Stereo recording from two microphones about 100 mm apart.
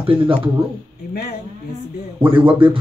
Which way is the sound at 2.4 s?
55° right (ahead or behind).